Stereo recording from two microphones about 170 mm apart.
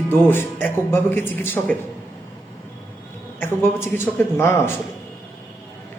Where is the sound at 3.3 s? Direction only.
15° left (ahead or behind).